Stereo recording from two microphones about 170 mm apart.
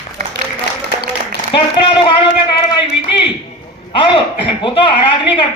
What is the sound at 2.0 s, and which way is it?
Speech, 25° left (ahead or behind).